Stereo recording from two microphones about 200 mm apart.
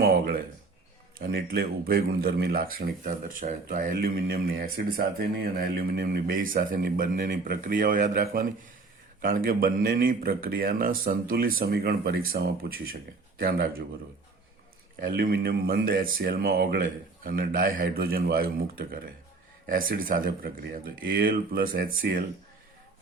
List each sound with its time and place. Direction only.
0.0 s a sound: 50° right (ahead or behind)
1.2 s speech: 50° right (ahead or behind)
15.0 s speech: 50° right (ahead or behind)